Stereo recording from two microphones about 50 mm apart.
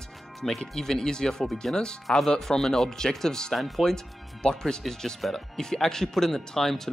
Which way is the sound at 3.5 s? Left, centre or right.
Centre.